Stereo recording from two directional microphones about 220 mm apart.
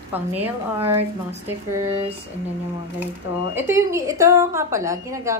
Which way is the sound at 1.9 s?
30° right (ahead or behind).